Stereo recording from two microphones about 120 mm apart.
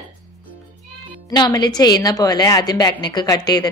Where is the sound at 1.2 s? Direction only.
35° left (ahead or behind).